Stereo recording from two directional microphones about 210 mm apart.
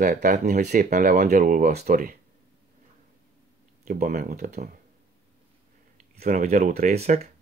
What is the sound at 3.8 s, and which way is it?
Speech, 45° right (ahead or behind).